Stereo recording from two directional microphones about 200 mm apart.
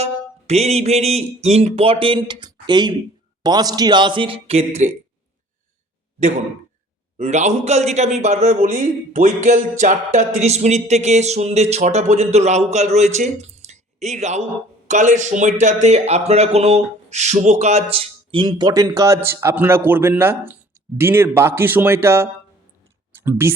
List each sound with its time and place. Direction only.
0.0 s a sound: 30° right (ahead or behind)
3.4 s speech: 20° right (ahead or behind)
7.2 s a man's voice: 35° right (ahead or behind); by 23.6 s 10° right (ahead or behind)